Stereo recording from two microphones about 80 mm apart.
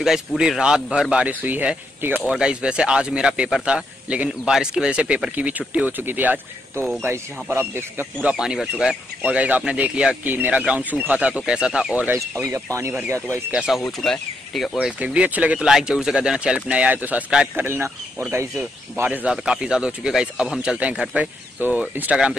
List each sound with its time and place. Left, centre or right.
0.4 s speech: centre
2.3 s speech: centre; by 8.1 s right
8.2 s speech: centre
12.4 s speech: right
13.5 s speech: centre
13.8 s speech: centre
14.5 s speech: centre
14.9 s speech: centre
17.6 s speech: right
19.0 s speech: right
19.3 s speech: centre
21.2 s speech: centre